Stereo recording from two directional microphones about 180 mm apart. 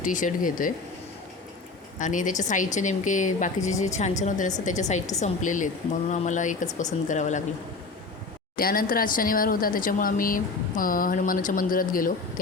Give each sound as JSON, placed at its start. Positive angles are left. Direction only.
{"t": 0.0, "sound": "speech", "side_deg": 45}
{"t": 2.0, "sound": "a woman's voice", "side_deg": 45}
{"t": 8.5, "sound": "speech", "side_deg": 55}